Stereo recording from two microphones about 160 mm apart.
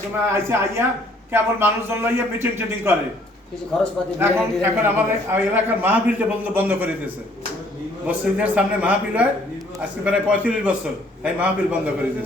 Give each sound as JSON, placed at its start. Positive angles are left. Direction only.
{"t": 0.3, "sound": "a man's voice", "side_deg": -15}
{"t": 4.2, "sound": "a man's voice", "side_deg": -15}
{"t": 8.0, "sound": "a man's voice", "side_deg": -10}